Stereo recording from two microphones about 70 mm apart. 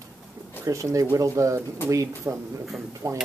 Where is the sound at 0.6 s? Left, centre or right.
Right.